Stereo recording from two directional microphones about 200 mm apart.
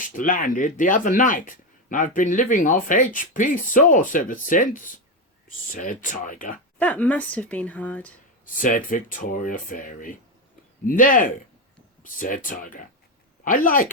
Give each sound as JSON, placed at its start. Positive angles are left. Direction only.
{"t": 0.2, "sound": "speech", "side_deg": 40}
{"t": 6.7, "sound": "a woman's voice", "side_deg": 10}
{"t": 8.5, "sound": "speech", "side_deg": 40}